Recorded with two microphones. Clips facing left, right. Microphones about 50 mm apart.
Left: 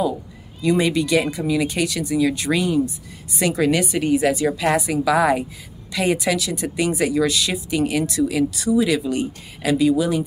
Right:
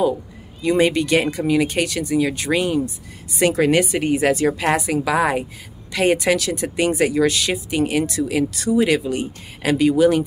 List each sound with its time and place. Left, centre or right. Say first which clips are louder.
0.6 s speech: right 1 dB; right
5.9 s speech: right 3 dB; right